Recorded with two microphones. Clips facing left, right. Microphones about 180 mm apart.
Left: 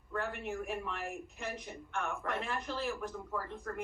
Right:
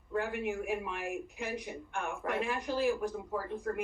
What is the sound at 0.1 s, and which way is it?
Speech, 15° right (ahead or behind).